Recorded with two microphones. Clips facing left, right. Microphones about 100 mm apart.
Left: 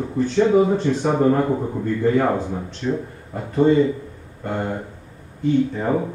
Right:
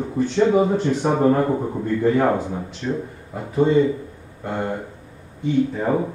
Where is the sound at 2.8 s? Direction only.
5° left (ahead or behind).